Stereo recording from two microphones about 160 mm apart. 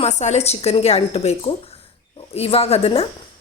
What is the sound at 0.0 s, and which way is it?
A woman's voice, 45° left (ahead or behind).